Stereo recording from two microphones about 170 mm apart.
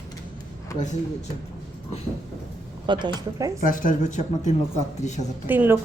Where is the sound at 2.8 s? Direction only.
25° right (ahead or behind).